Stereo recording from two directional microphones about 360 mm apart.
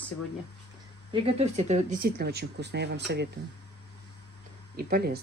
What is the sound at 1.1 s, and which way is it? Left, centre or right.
Speech, centre.